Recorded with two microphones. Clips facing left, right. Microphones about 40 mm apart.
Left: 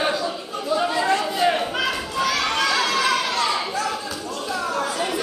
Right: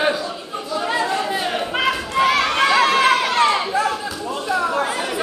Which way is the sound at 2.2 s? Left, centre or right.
Right.